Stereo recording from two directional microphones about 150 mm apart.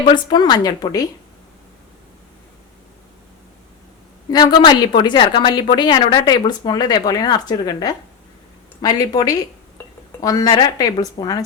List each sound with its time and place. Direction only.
0.1 s speech: 30° left (ahead or behind)
4.3 s speech: 30° left (ahead or behind)